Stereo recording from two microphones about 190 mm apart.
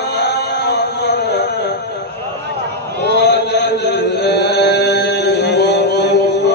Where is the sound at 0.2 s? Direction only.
60° left (ahead or behind).